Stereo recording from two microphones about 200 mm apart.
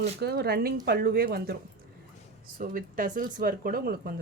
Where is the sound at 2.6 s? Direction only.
45° right (ahead or behind).